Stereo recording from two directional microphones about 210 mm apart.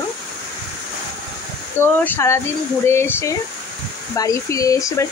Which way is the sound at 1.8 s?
10° left (ahead or behind).